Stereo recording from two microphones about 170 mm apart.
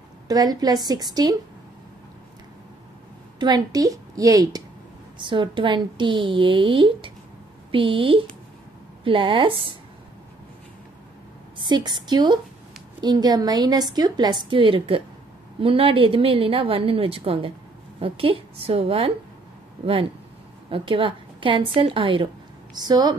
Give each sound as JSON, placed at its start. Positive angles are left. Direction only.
{"t": 0.3, "sound": "a woman's voice", "side_deg": -25}
{"t": 3.3, "sound": "a woman's voice", "side_deg": -25}
{"t": 11.6, "sound": "a woman's voice", "side_deg": -25}
{"t": 20.7, "sound": "a woman's voice", "side_deg": -30}